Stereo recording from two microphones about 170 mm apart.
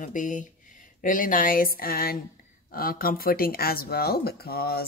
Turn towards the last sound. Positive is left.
turn(degrees=65)  # may be behind; listen again after turning